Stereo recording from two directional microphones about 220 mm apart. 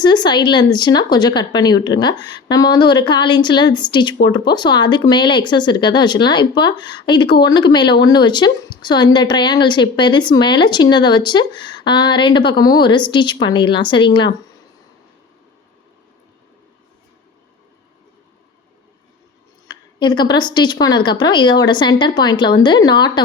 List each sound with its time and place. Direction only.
0.0 s speech: 20° left (ahead or behind)
19.6 s speech: 20° left (ahead or behind)